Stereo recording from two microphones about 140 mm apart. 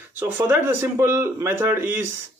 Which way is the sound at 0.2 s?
15° right (ahead or behind).